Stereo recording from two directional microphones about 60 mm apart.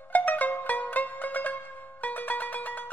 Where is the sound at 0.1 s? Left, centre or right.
Left.